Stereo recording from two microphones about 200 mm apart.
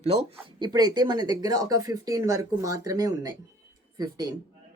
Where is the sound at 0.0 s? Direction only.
30° right (ahead or behind).